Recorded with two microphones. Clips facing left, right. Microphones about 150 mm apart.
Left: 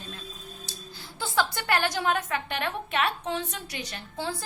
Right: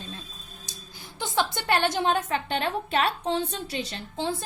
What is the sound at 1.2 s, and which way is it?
A woman's voice, 20° right (ahead or behind).